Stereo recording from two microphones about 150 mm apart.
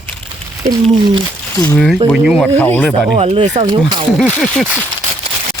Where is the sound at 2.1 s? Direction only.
Centre (ahead or behind).